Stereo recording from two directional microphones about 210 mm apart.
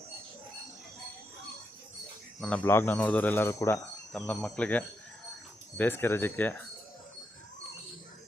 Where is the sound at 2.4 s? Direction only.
5° left (ahead or behind).